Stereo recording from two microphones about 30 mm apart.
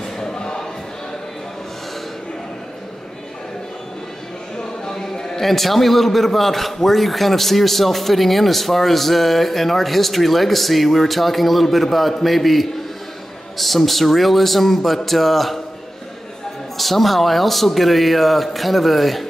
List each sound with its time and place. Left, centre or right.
0.0 s choir: left
4.8 s a sound: centre
5.4 s a man's voice: centre
16.7 s a man's voice: centre